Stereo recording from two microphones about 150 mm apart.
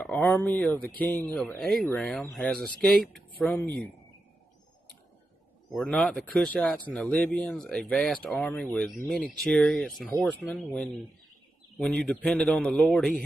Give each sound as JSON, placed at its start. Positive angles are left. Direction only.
{"t": 0.0, "sound": "a man's voice", "side_deg": 5}
{"t": 5.7, "sound": "a man's voice", "side_deg": 5}